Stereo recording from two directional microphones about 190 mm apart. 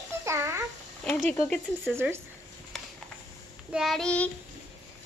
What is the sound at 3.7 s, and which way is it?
Child singing, centre (ahead or behind).